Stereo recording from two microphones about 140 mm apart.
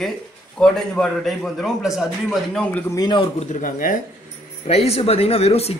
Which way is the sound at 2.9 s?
30° left (ahead or behind).